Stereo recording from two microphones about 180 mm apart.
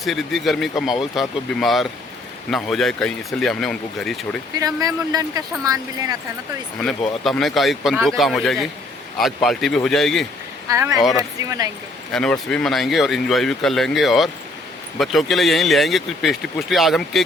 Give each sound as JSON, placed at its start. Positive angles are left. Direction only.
{"t": 0.0, "sound": "speech", "side_deg": 0}
{"t": 4.5, "sound": "speech", "side_deg": -20}
{"t": 6.8, "sound": "speech", "side_deg": 0}
{"t": 10.7, "sound": "speech", "side_deg": -20}
{"t": 12.1, "sound": "speech", "side_deg": 5}